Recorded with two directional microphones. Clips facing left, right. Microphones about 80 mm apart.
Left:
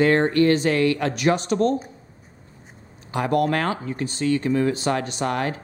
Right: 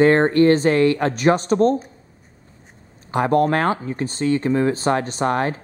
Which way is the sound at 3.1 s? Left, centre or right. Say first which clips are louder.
Right 4 dB; right.